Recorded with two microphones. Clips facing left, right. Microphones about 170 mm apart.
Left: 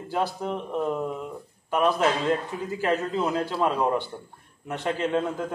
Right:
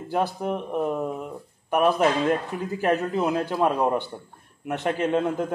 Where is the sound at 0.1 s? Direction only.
15° right (ahead or behind).